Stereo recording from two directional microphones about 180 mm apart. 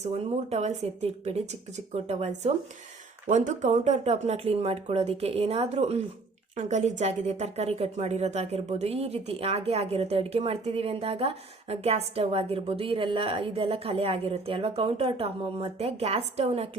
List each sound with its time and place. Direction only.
0.0 s a woman's voice: 35° right (ahead or behind)